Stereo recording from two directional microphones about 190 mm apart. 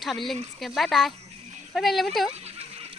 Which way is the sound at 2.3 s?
35° right (ahead or behind).